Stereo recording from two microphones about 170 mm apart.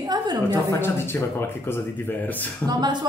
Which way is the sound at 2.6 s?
25° right (ahead or behind).